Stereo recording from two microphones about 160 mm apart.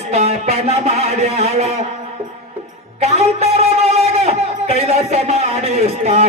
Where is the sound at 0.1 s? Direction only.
40° right (ahead or behind).